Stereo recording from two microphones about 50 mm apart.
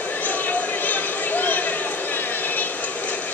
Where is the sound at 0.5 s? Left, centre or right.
Left.